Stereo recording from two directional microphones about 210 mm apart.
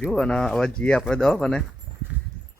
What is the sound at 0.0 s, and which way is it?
Speech, 5° left (ahead or behind).